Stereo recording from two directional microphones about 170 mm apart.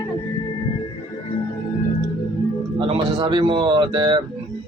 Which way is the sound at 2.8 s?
30° right (ahead or behind).